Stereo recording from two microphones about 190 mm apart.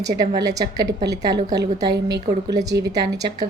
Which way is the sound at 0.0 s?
20° right (ahead or behind).